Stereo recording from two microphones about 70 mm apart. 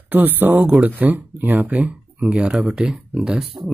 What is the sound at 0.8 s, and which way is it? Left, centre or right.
Speech, right.